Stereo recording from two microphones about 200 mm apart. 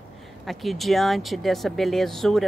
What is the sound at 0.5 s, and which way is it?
Speech, centre (ahead or behind).